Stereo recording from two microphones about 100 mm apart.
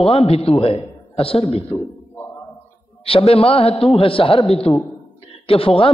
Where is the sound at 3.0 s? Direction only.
75° left (ahead or behind).